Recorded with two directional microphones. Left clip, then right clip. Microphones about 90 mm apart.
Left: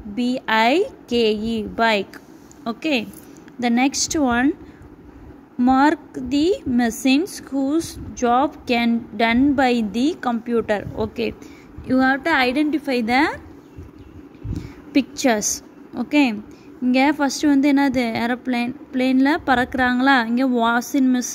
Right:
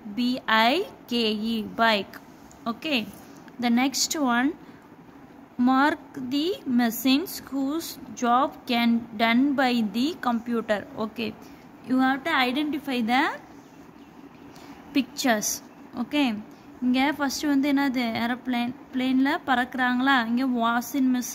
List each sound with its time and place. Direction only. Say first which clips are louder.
0.1 s a woman's voice: left 3 dB; 25° left (ahead or behind)
5.7 s a woman's voice: left 6 dB; 40° left (ahead or behind)
11.8 s a woman's voice: left 5 dB; 55° left (ahead or behind)
12.1 s a woman's voice: left 6 dB; 90° left; by 13.4 s 60° left (ahead or behind)
14.9 s a woman's voice: left 5 dB; 45° left (ahead or behind)